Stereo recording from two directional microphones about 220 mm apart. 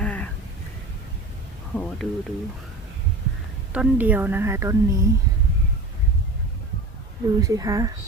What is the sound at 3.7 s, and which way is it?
Speech, 5° right (ahead or behind).